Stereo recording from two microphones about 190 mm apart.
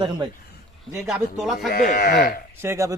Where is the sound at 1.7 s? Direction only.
50° left (ahead or behind).